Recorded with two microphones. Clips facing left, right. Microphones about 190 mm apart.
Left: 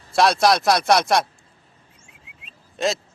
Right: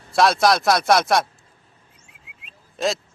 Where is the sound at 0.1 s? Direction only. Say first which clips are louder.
Even; centre (ahead or behind).